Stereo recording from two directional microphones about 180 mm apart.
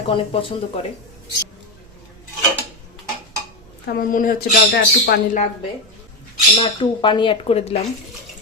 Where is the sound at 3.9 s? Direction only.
50° left (ahead or behind).